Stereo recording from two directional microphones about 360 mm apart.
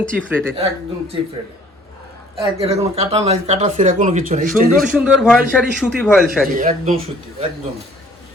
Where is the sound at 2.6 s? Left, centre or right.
Centre.